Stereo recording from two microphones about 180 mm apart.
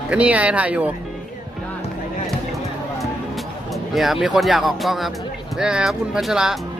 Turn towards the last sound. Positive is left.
turn(degrees=-5)  # may be behind; listen again after turning